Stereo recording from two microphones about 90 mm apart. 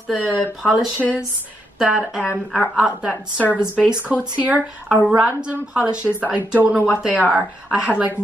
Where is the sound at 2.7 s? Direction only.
10° right (ahead or behind).